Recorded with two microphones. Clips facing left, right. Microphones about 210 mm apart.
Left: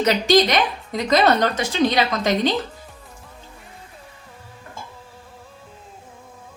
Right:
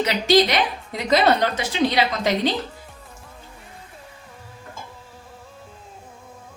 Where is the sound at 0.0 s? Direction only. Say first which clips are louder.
Left 1 dB; 45° left (ahead or behind).